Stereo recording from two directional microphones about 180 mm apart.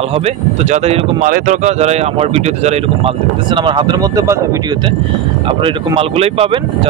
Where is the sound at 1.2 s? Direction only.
45° right (ahead or behind).